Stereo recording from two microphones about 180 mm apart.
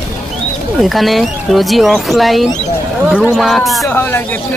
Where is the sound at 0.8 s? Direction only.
Centre (ahead or behind).